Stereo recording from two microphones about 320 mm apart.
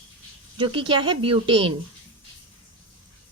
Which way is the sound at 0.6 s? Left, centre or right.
Centre.